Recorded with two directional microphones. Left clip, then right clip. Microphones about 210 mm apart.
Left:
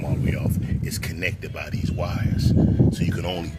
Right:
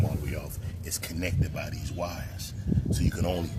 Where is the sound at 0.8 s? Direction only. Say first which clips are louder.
Left 5 dB; 20° left (ahead or behind).